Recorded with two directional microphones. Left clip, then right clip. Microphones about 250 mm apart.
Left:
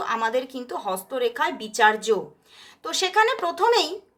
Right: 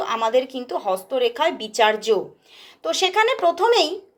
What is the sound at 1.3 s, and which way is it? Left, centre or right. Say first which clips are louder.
Speech: right 4 dB; centre.